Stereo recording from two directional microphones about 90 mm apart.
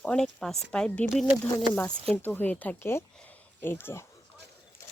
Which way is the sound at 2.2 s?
20° left (ahead or behind).